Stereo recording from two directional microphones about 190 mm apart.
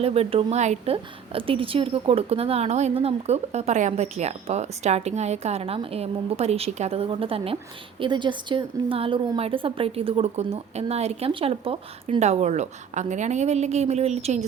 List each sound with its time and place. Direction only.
0.0 s a woman's voice: 30° right (ahead or behind)